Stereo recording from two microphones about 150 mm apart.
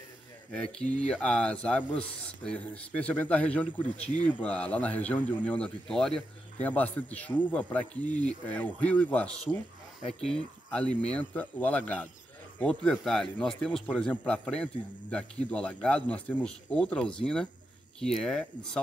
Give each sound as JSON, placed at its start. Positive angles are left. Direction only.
{"t": 0.5, "sound": "speech", "side_deg": 5}